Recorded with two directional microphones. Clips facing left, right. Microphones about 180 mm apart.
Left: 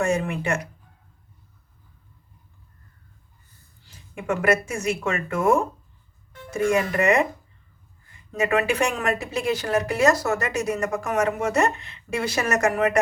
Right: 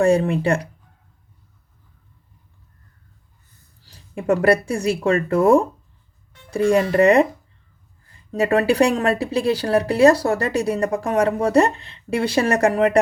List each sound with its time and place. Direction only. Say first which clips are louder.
0.0 s speech: right 7 dB; 35° right (ahead or behind)
3.8 s speech: right 7 dB; 35° right (ahead or behind)